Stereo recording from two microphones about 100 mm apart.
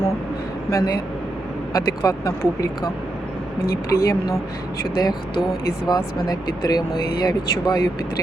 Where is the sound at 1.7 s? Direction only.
35° left (ahead or behind).